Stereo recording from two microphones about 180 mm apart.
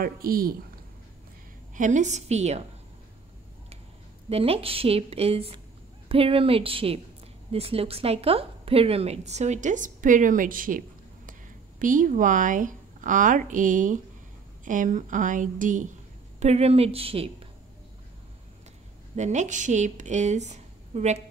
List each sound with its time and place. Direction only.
0.0 s speech: 55° right (ahead or behind)
1.8 s a woman's voice: 45° right (ahead or behind)
4.3 s a woman's voice: 35° right (ahead or behind)
19.1 s a woman's voice: 40° right (ahead or behind)